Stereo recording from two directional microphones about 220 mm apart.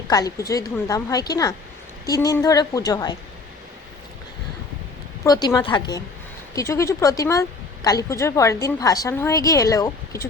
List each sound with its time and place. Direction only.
0.1 s a woman's voice: 15° left (ahead or behind)
5.2 s a woman's voice: 15° left (ahead or behind)